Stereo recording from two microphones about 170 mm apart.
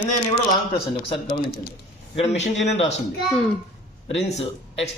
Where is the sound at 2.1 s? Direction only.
40° left (ahead or behind).